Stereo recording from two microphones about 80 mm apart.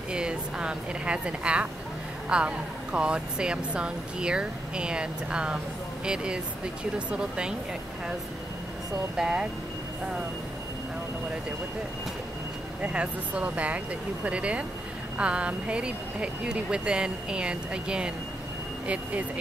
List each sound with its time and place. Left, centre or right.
0.1 s speech: centre
9.1 s speech: centre
12.8 s speech: centre